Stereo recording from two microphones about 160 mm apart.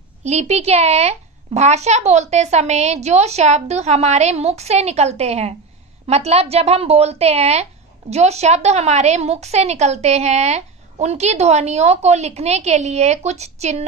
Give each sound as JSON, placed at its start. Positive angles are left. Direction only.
{"t": 0.2, "sound": "a woman's voice", "side_deg": -45}